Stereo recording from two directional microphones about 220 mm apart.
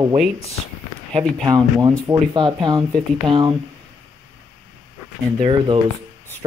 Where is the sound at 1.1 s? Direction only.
15° right (ahead or behind).